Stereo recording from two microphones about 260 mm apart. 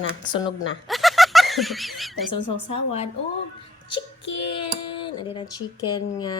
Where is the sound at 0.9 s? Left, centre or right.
Centre.